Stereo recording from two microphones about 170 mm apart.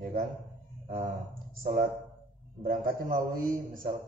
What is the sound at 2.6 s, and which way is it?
Speech, 55° right (ahead or behind).